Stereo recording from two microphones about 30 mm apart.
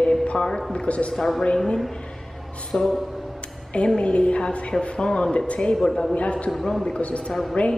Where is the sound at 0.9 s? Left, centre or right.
Left.